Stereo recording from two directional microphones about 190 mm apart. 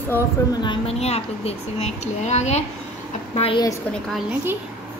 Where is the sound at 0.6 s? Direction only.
30° left (ahead or behind).